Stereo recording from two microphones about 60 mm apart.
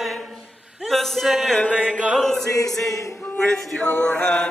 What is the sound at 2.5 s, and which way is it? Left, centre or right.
Chant, left.